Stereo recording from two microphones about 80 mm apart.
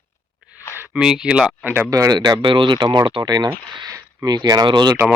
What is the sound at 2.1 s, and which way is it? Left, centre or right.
Speech, right.